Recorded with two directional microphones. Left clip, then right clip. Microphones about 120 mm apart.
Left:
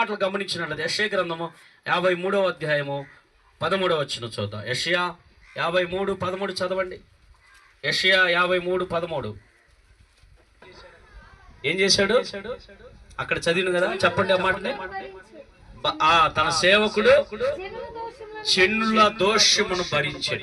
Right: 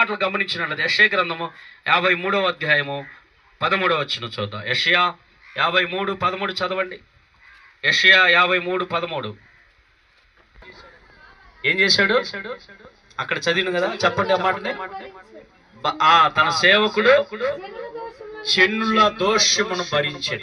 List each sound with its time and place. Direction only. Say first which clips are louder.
0.0 s a man's voice: right 4 dB; 40° left (ahead or behind)
11.6 s a man's voice: right 4 dB; 40° left (ahead or behind)